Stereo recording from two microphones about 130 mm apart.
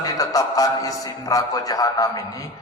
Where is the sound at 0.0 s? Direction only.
30° left (ahead or behind).